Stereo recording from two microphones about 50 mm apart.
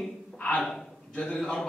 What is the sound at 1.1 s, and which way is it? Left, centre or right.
Speech, left.